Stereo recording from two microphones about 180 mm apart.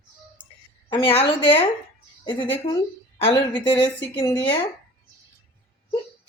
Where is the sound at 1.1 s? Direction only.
35° left (ahead or behind).